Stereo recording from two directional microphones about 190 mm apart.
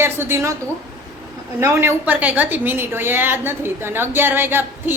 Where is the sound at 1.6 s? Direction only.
15° right (ahead or behind).